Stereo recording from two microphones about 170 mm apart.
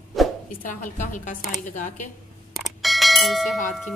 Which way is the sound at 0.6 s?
50° left (ahead or behind).